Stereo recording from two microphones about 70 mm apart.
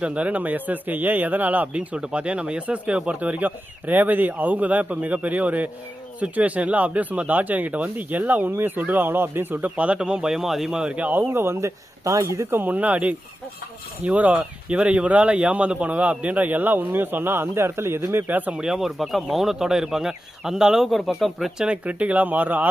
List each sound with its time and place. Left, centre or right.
0.0 s speech: centre
11.3 s speech: right
12.5 s speech: right
18.6 s speech: centre
21.7 s speech: centre